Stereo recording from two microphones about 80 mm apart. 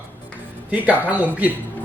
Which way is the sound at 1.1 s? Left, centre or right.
Centre.